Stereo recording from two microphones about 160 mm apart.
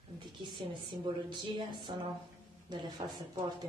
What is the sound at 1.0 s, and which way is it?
A woman's voice, 30° right (ahead or behind).